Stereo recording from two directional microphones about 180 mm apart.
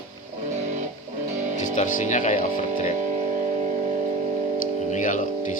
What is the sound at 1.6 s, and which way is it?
Speech, 45° left (ahead or behind).